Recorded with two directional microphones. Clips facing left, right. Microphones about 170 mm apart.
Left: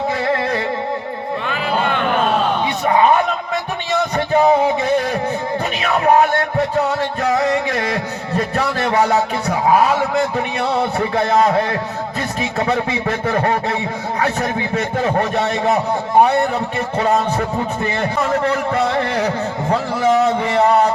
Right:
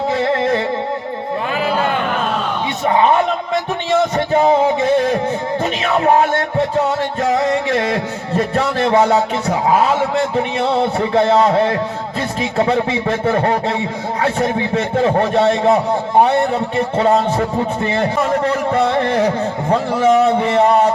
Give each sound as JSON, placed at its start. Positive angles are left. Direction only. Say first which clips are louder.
{"t": 0.1, "sound": "music", "louder": "right 3 dB", "side_deg": -25}
{"t": 4.4, "sound": "music", "louder": "even", "side_deg": -25}
{"t": 5.9, "sound": "music", "louder": "even", "side_deg": -25}
{"t": 8.5, "sound": "a man's voice", "louder": "right 3 dB", "side_deg": -25}